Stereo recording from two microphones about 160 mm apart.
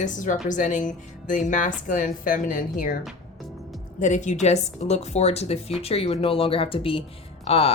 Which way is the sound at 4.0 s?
50° left (ahead or behind).